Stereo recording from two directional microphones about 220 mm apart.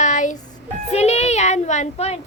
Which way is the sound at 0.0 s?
35° left (ahead or behind).